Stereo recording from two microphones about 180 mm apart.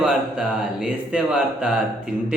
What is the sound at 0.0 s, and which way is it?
Speech, 5° right (ahead or behind).